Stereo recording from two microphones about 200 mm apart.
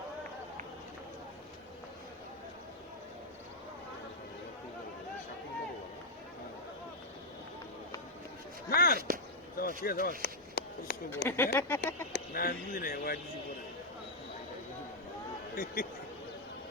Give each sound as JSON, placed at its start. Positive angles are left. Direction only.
{"t": 8.7, "sound": "speech", "side_deg": 50}
{"t": 9.0, "sound": "speech", "side_deg": -45}
{"t": 9.6, "sound": "speech", "side_deg": 45}
{"t": 10.2, "sound": "a sound", "side_deg": 50}
{"t": 11.1, "sound": "speech", "side_deg": 10}
{"t": 12.1, "sound": "speech", "side_deg": 50}
{"t": 15.5, "sound": "speech", "side_deg": 45}